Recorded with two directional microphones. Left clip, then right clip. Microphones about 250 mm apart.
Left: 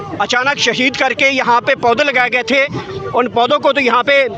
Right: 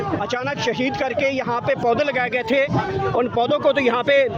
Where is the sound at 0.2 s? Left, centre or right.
Left.